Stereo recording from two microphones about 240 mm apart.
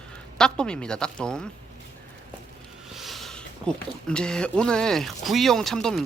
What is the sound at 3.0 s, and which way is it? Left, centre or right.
Speech, centre.